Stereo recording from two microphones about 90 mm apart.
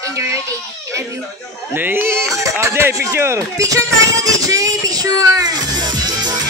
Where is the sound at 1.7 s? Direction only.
25° right (ahead or behind).